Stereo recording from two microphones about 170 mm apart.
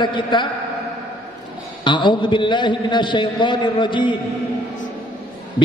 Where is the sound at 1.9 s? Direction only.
25° left (ahead or behind).